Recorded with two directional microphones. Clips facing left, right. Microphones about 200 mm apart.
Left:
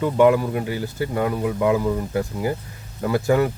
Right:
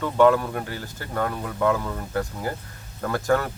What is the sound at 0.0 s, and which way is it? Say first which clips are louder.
Speech: left 2 dB; 15° left (ahead or behind).